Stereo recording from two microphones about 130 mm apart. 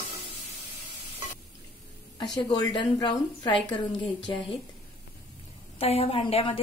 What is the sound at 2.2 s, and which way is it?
A woman's voice, 30° left (ahead or behind).